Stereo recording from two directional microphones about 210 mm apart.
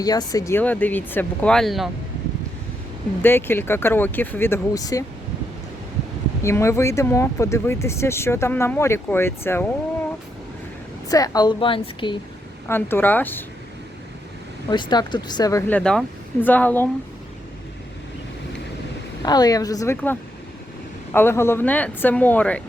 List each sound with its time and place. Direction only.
0.0 s speech: 20° left (ahead or behind); by 1.9 s centre (ahead or behind)
3.2 s speech: 10° left (ahead or behind)
6.4 s speech: 15° left (ahead or behind)
11.1 s speech: 20° left (ahead or behind)
12.6 s speech: 10° left (ahead or behind)
14.7 s speech: 20° left (ahead or behind)
15.8 s speech: 5° left (ahead or behind)
19.2 s speech: 20° left (ahead or behind)